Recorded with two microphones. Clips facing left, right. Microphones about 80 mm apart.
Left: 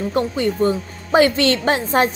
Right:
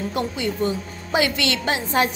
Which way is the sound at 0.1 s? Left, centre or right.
Left.